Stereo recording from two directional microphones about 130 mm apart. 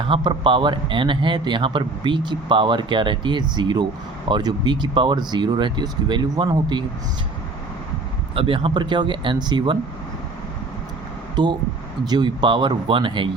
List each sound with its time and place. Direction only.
0.0 s speech: 40° right (ahead or behind)
8.4 s speech: 45° right (ahead or behind)
11.4 s speech: 35° right (ahead or behind)